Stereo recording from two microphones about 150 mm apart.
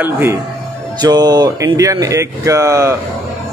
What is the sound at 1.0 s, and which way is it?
Speech, 25° right (ahead or behind).